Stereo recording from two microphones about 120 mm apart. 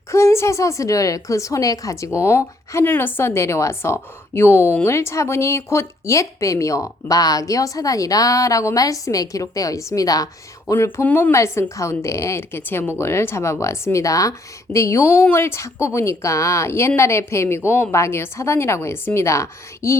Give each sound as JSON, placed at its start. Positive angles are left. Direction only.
{"t": 0.1, "sound": "speech", "side_deg": 25}